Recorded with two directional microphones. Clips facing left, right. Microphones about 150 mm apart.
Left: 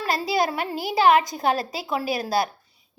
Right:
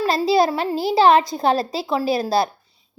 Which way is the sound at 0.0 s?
30° right (ahead or behind).